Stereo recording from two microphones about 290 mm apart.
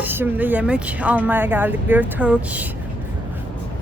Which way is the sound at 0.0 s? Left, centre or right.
Centre.